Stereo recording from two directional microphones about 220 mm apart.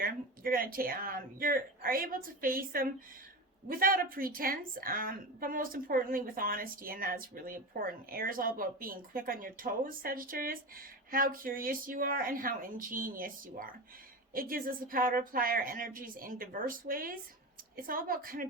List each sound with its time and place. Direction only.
0.0 s a woman's voice: 40° right (ahead or behind)